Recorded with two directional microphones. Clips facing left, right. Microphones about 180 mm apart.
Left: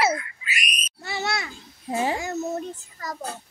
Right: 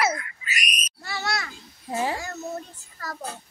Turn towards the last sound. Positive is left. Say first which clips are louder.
# left 4 dB
turn(degrees=20)  # may be behind; listen again after turning